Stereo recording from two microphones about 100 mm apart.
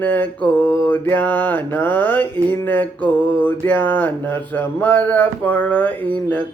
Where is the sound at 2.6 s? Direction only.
15° left (ahead or behind).